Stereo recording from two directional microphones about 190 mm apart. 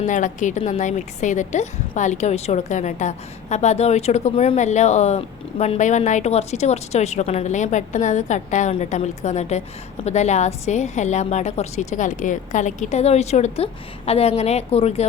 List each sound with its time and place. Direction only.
0.0 s a woman's voice: 40° left (ahead or behind)